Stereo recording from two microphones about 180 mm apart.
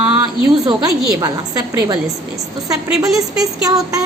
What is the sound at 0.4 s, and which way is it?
A woman's voice, 20° right (ahead or behind).